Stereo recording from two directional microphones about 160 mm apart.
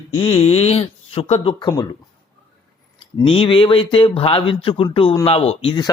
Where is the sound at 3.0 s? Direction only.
35° left (ahead or behind).